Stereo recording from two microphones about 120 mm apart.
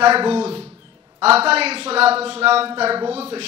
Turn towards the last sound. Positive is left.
turn(degrees=-55)  # may be behind; listen again after turning